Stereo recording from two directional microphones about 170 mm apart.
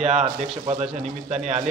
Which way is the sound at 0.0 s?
45° right (ahead or behind).